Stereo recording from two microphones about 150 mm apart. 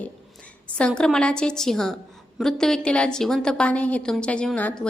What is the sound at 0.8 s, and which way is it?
A woman's voice, 5° left (ahead or behind).